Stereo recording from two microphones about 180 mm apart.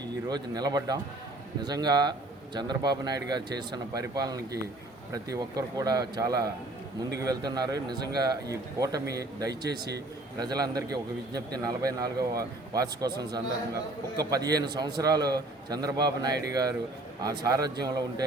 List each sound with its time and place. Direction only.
0.0 s a man's voice: 20° right (ahead or behind)